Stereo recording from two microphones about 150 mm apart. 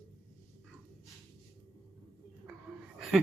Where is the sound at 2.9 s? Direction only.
Centre (ahead or behind).